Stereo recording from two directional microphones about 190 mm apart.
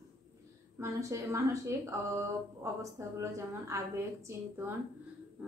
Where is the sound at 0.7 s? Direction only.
15° right (ahead or behind).